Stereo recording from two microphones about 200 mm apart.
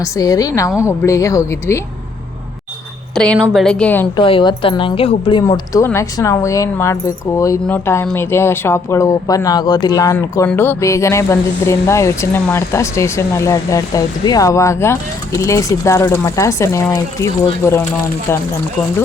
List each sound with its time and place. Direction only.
0.0 s speech: 20° left (ahead or behind)
3.2 s a woman's voice: 5° left (ahead or behind)
4.1 s a woman's voice: 25° left (ahead or behind)
5.4 s speech: 15° left (ahead or behind)